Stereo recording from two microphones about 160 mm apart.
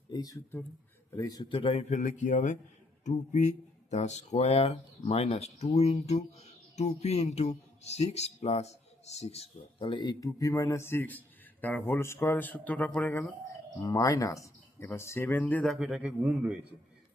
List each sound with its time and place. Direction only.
0.1 s speech: 20° left (ahead or behind)
13.8 s speech: 20° left (ahead or behind); by 16.6 s 5° right (ahead or behind)